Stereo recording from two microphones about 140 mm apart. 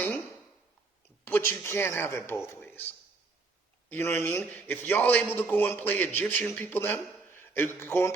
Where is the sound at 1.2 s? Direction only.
15° left (ahead or behind).